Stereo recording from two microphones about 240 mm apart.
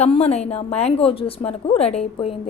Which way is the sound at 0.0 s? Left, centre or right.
Left.